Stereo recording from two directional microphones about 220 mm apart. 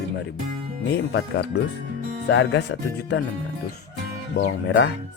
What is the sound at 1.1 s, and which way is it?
Speech, 50° left (ahead or behind).